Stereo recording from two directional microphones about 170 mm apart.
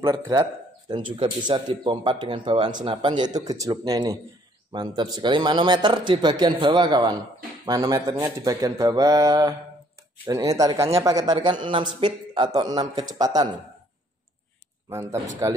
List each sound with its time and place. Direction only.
0.0 s a man's voice: 20° right (ahead or behind)
14.9 s speech: 15° right (ahead or behind)